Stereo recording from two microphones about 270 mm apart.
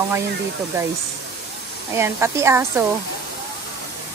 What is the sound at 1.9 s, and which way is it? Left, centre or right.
Speech, centre.